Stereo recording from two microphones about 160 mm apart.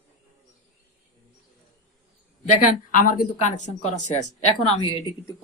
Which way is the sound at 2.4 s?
55° left (ahead or behind).